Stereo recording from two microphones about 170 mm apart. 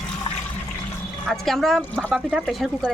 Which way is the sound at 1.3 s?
Centre (ahead or behind).